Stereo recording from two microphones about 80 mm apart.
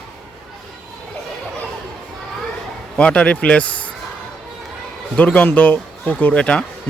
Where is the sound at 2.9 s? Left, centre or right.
Centre.